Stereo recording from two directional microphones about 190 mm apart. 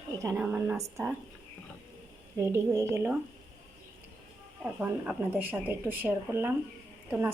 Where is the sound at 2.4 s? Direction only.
15° right (ahead or behind).